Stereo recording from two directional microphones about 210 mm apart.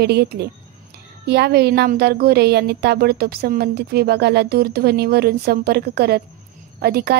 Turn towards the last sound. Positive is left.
turn(degrees=-50)  # may be behind; listen again after turning